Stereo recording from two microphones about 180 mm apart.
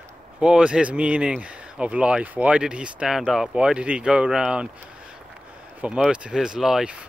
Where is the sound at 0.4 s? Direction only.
5° right (ahead or behind).